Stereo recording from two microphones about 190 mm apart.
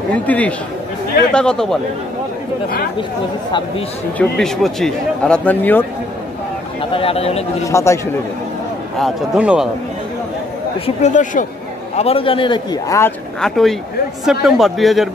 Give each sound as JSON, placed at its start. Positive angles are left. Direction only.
{"t": 0.1, "sound": "a man's voice", "side_deg": 5}
{"t": 4.2, "sound": "speech", "side_deg": 0}
{"t": 6.8, "sound": "speech", "side_deg": 30}
{"t": 7.6, "sound": "speech", "side_deg": 15}
{"t": 8.9, "sound": "a man's voice", "side_deg": 0}
{"t": 11.0, "sound": "a man's voice", "side_deg": 40}
{"t": 13.4, "sound": "a man's voice", "side_deg": 0}